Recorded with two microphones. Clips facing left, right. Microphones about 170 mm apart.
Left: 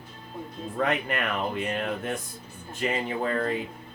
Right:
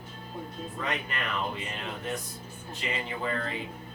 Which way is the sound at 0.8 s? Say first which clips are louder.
Left 8 dB; 60° left (ahead or behind).